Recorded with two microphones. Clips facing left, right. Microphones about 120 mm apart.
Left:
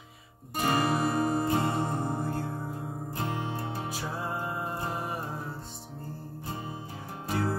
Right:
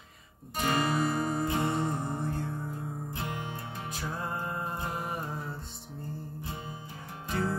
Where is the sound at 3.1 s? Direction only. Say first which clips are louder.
Left 7 dB; 35° left (ahead or behind).